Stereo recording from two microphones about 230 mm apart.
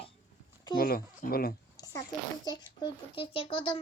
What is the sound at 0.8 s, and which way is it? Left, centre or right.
Speech, left.